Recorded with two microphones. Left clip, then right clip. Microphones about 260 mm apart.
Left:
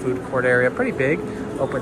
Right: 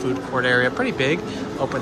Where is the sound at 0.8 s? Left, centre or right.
Right.